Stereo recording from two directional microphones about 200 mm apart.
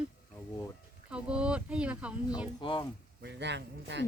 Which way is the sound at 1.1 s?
5° right (ahead or behind).